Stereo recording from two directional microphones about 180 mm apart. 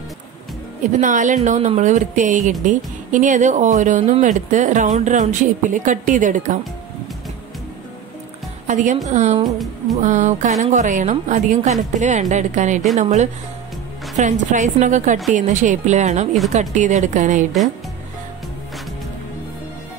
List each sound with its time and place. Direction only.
1.0 s a woman's voice: 45° right (ahead or behind)
8.6 s a woman's voice: 45° right (ahead or behind)